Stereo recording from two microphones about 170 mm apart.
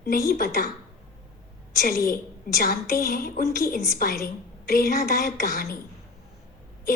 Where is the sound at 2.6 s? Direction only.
55° left (ahead or behind).